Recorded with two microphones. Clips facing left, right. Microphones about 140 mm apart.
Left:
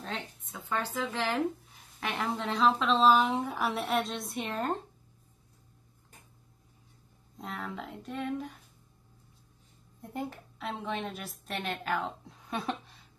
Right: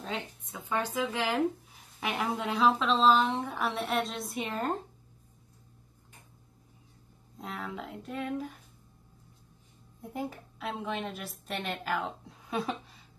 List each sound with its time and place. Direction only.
0.5 s a woman's voice: 10° right (ahead or behind)
7.3 s a woman's voice: centre (ahead or behind)
10.0 s a woman's voice: centre (ahead or behind)